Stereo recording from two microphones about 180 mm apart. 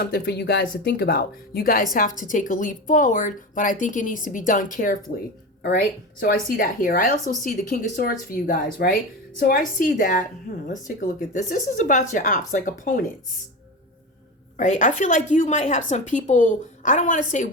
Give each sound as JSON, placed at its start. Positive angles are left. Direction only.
{"t": 0.0, "sound": "speech", "side_deg": 65}
{"t": 14.6, "sound": "speech", "side_deg": 45}